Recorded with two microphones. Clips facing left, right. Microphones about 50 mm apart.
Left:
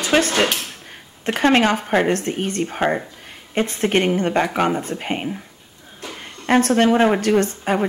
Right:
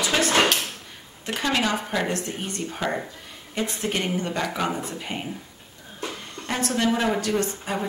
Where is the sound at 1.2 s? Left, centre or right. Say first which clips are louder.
Left 8 dB; left.